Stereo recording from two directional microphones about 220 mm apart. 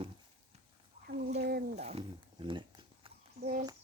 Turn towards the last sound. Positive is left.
turn(degrees=-25)  # may be behind; listen again after turning